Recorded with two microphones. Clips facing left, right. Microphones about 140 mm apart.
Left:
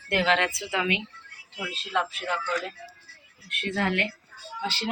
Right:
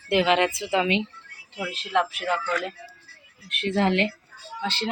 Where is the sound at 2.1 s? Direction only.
15° right (ahead or behind).